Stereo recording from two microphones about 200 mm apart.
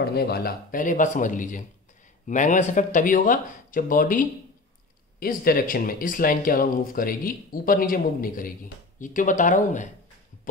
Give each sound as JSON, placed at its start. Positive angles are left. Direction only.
{"t": 0.0, "sound": "speech", "side_deg": 50}